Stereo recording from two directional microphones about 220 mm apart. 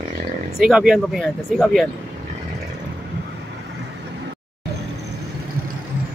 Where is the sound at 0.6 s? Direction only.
Centre (ahead or behind).